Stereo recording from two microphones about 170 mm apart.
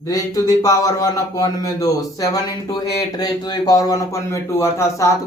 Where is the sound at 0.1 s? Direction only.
20° left (ahead or behind).